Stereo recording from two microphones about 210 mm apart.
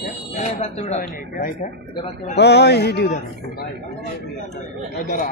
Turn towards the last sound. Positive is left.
turn(degrees=40)  # may be behind; listen again after turning